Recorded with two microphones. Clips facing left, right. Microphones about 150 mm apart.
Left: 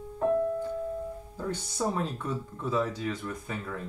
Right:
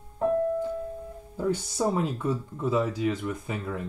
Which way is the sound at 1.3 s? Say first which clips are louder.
Right 8 dB; 15° right (ahead or behind).